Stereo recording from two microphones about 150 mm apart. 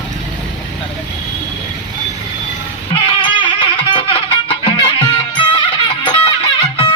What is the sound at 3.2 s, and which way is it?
Music, 35° left (ahead or behind).